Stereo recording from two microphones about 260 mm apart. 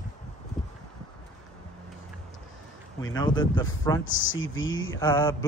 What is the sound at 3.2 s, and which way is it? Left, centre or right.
Speech, centre.